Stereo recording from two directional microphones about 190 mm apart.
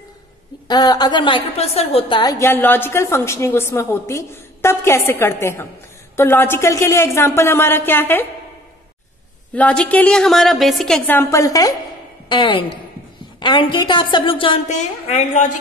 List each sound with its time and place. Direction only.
0.7 s a woman's voice: 20° left (ahead or behind)
9.6 s a woman's voice: 5° left (ahead or behind); by 14.6 s 25° left (ahead or behind)
14.7 s a woman's voice: 40° left (ahead or behind)